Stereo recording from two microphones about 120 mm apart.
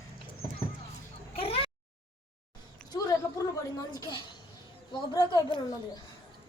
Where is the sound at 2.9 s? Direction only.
35° left (ahead or behind).